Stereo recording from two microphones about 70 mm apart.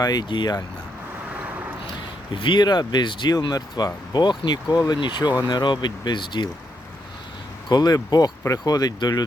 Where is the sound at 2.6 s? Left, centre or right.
Left.